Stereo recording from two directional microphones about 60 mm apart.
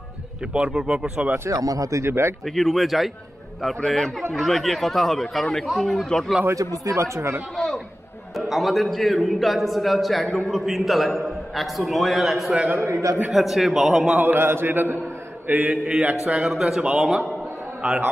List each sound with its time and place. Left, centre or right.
0.7 s speech: centre
1.5 s speech: right
2.4 s a man's voice: centre
6.8 s speech: right
7.5 s a sound: centre
8.4 s a man's voice: centre
12.5 s a man's voice: right
12.8 s a man's voice: right
13.3 s a man's voice: centre
14.1 s speech: right
15.4 s mantra: right
16.0 s a man's voice: right
16.3 s a man's voice: centre